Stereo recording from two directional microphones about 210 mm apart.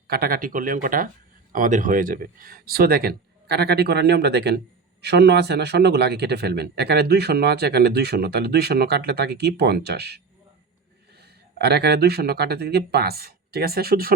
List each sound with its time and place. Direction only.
0.1 s a man's voice: 45° right (ahead or behind)
11.2 s speech: 50° right (ahead or behind)